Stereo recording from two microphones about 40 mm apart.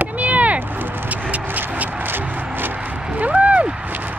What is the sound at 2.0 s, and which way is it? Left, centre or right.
Music, right.